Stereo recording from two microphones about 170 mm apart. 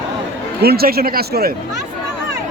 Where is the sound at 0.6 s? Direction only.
65° right (ahead or behind).